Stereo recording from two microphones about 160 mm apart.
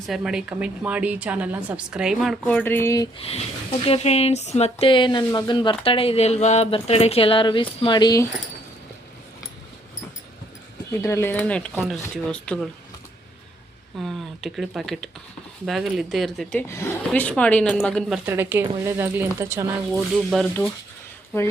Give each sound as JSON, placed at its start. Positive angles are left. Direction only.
{"t": 0.1, "sound": "a woman's voice", "side_deg": -5}
{"t": 3.2, "sound": "speech", "side_deg": 35}
{"t": 11.0, "sound": "speech", "side_deg": 15}
{"t": 14.0, "sound": "speech", "side_deg": 0}
{"t": 16.6, "sound": "speech", "side_deg": 15}
{"t": 18.3, "sound": "a woman's voice", "side_deg": -15}
{"t": 20.1, "sound": "speech", "side_deg": 0}